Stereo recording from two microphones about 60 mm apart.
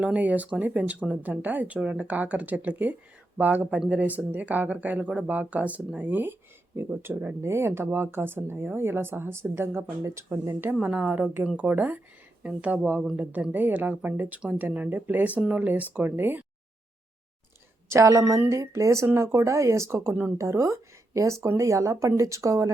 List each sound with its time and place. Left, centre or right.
0.0 s speech: right
5.1 s speech: centre
5.4 s speech: right
7.4 s speech: right
10.8 s speech: right
18.2 s speech: right
20.4 s speech: right